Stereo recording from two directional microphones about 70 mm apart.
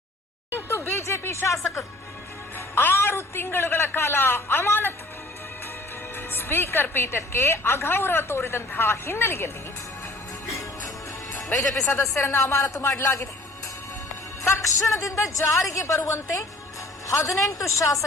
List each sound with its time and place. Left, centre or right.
0.5 s a sound: left
2.6 s a man's voice: left
6.1 s a woman's voice: left
11.9 s speech: left
14.4 s speech: left
17.1 s speech: left